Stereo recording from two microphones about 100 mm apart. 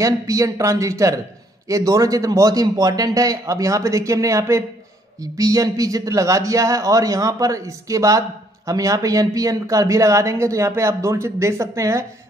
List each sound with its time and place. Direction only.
0.0 s speech: 35° right (ahead or behind)